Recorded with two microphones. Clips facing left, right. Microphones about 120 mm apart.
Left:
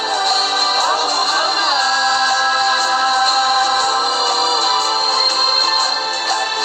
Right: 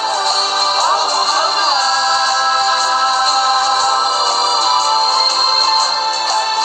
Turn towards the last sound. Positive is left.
turn(degrees=-30)  # may be behind; listen again after turning